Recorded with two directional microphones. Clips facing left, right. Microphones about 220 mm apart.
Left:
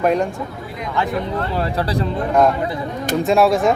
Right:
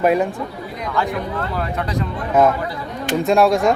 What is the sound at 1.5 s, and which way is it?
Speech, 30° left (ahead or behind).